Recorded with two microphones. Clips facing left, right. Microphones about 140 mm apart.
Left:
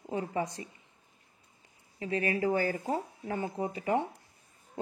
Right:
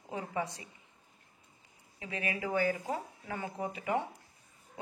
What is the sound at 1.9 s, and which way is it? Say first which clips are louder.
A woman's voice: left 7 dB; 35° left (ahead or behind).